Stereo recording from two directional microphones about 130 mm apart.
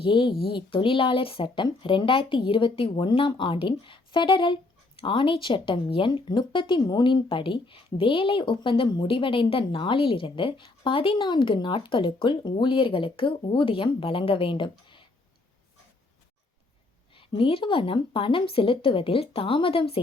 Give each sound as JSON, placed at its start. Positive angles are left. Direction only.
{"t": 0.0, "sound": "speech", "side_deg": 40}
{"t": 17.2, "sound": "speech", "side_deg": 45}